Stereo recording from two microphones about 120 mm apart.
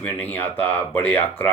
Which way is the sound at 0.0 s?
15° left (ahead or behind).